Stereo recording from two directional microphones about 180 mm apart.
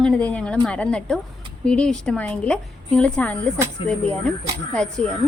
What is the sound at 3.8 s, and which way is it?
Speech, 30° left (ahead or behind).